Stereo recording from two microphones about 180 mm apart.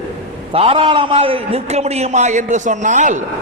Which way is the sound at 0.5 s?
30° right (ahead or behind).